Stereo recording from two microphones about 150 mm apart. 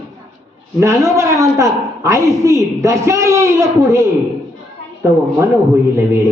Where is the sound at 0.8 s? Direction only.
20° right (ahead or behind).